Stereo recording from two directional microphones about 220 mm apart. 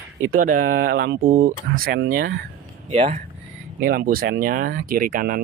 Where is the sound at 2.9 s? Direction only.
30° right (ahead or behind).